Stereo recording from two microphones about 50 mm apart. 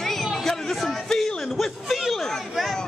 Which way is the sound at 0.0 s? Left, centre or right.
Centre.